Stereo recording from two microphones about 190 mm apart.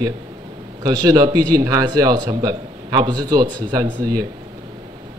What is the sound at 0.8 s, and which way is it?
A man's voice, 20° right (ahead or behind).